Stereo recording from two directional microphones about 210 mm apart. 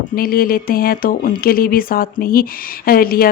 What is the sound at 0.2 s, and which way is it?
Speech, 45° left (ahead or behind).